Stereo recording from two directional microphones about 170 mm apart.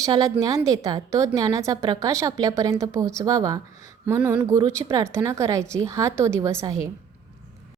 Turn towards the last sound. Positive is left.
turn(degrees=-20)  # may be behind; listen again after turning